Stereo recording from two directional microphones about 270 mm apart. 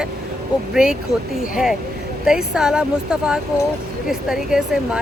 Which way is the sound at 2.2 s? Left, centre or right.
Centre.